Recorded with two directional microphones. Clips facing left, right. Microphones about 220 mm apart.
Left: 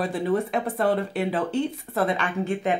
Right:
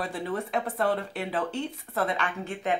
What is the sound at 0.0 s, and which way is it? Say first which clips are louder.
Speech: left 7 dB; 15° left (ahead or behind).